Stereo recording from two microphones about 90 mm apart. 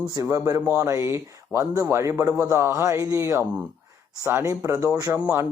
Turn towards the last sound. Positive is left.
turn(degrees=-15)  # may be behind; listen again after turning